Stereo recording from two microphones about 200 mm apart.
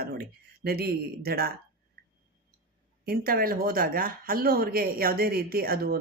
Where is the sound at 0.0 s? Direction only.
50° right (ahead or behind).